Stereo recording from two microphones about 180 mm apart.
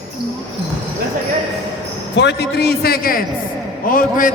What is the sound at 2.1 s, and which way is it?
A man's voice, 70° left (ahead or behind).